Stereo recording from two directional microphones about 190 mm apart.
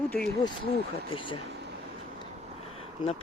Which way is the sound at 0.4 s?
30° left (ahead or behind).